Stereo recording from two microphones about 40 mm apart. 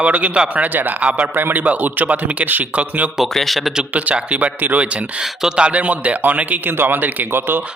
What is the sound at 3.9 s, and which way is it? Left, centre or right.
Speech, right.